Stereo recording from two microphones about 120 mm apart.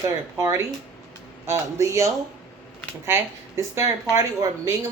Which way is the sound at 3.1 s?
25° right (ahead or behind).